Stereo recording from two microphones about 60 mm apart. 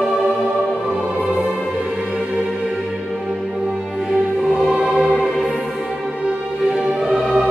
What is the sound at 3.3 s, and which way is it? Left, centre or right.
Music, centre.